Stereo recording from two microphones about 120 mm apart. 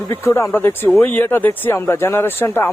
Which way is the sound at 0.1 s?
25° left (ahead or behind).